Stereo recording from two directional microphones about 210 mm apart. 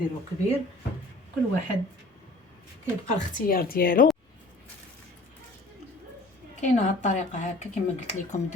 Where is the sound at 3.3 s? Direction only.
45° left (ahead or behind).